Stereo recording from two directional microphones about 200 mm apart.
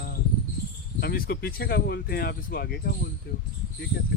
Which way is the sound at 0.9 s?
50° left (ahead or behind).